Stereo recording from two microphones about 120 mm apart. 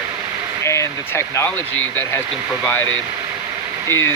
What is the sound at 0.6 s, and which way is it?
Speech, 25° left (ahead or behind).